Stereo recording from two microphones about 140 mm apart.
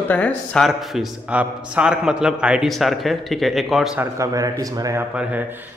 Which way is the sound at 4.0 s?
25° right (ahead or behind).